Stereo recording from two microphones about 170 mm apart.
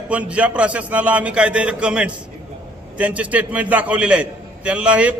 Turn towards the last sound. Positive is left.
turn(degrees=-5)  # may be behind; listen again after turning